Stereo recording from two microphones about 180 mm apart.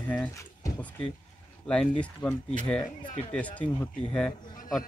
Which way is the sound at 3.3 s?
10° left (ahead or behind).